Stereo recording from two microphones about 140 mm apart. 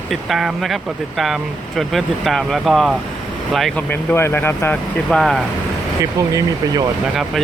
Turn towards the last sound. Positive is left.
turn(degrees=-25)  # may be behind; listen again after turning